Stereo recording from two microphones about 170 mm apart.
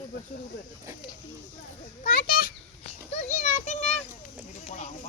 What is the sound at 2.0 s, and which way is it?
Speech, 60° left (ahead or behind).